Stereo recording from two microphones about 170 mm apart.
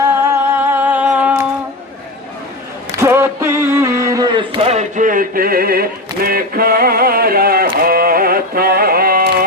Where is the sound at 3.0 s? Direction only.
15° right (ahead or behind).